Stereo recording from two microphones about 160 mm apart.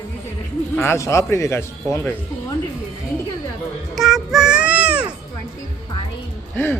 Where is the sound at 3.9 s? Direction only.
Centre (ahead or behind).